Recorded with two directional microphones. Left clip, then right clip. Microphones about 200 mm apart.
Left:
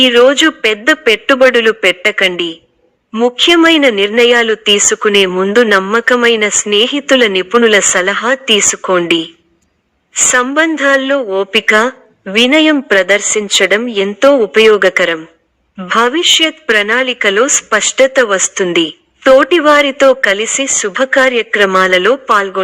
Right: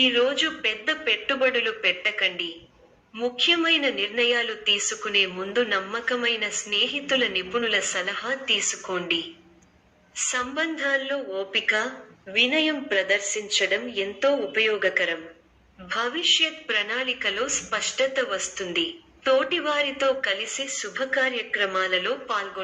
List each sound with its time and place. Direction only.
0.0 s a woman's voice: 50° left (ahead or behind)